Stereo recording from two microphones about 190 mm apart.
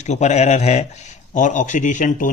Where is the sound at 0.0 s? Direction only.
35° left (ahead or behind).